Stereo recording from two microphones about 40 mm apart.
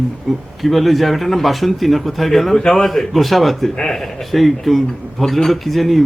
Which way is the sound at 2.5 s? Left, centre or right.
Centre.